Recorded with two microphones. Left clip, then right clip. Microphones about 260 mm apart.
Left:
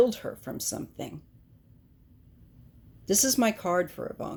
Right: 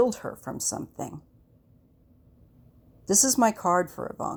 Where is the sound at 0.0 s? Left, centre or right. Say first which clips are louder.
Even; right.